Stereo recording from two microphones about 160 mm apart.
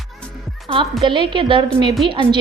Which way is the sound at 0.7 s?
30° right (ahead or behind).